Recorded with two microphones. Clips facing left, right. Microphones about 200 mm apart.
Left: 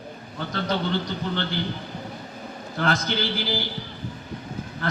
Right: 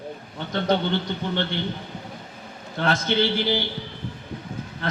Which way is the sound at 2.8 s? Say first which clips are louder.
Right 2 dB; 25° right (ahead or behind).